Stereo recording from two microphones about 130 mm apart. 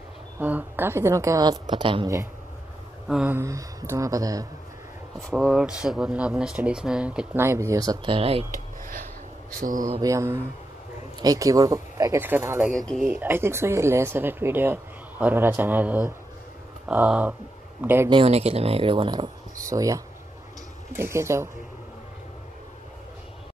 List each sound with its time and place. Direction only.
0.4 s a woman's voice: 15° right (ahead or behind); by 2.0 s 40° right (ahead or behind)
3.1 s speech: 5° right (ahead or behind)
3.3 s speech: 20° right (ahead or behind)
5.2 s speech: 5° right (ahead or behind)
7.3 s speech: 20° right (ahead or behind)
8.1 s speech: 50° right (ahead or behind)
9.5 s speech: 90° right
10.0 s speech: 25° right (ahead or behind)
12.2 s speech: 15° right (ahead or behind)
12.7 s speech: centre (ahead or behind)
13.1 s speech: 15° right (ahead or behind)
18.1 s speech: 50° right (ahead or behind); by 21.5 s 20° right (ahead or behind)